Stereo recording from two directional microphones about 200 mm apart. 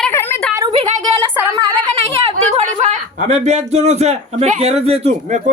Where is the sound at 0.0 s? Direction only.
10° left (ahead or behind).